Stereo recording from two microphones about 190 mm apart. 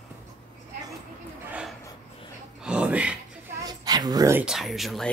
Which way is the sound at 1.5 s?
5° right (ahead or behind).